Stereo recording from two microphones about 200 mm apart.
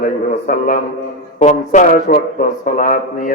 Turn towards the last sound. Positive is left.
turn(degrees=40)  # may be behind; listen again after turning